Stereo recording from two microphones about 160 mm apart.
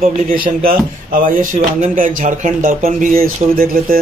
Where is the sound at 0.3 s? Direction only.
60° right (ahead or behind).